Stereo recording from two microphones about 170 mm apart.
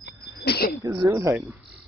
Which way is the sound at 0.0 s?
70° left (ahead or behind).